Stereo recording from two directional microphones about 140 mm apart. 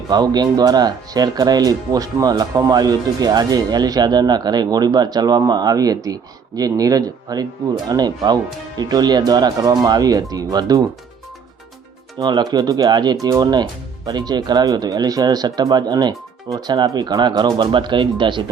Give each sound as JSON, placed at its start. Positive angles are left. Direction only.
{"t": 0.1, "sound": "speech", "side_deg": -30}
{"t": 12.2, "sound": "speech", "side_deg": -30}